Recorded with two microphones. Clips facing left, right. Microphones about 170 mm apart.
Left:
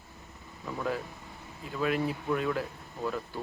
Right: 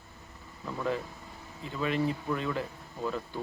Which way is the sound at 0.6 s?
5° left (ahead or behind).